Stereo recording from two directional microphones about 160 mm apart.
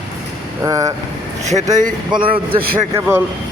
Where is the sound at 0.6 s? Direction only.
20° right (ahead or behind).